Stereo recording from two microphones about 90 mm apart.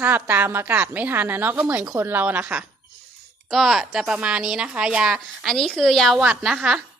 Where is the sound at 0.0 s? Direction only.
20° right (ahead or behind).